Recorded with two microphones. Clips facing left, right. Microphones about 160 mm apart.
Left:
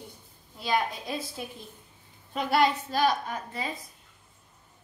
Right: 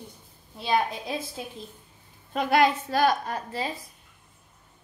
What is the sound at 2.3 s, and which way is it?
Speech, 50° right (ahead or behind).